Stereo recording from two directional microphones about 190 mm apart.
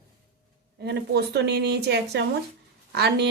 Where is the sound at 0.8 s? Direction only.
60° right (ahead or behind).